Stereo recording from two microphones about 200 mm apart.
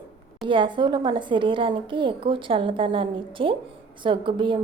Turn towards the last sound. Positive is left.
turn(degrees=-25)  # may be behind; listen again after turning